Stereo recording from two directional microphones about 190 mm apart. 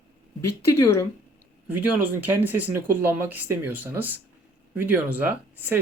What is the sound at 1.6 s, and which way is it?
Speech, 10° right (ahead or behind).